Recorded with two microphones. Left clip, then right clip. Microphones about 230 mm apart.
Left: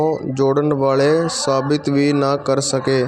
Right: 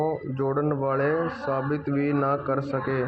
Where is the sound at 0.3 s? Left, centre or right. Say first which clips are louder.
Left 11 dB; left.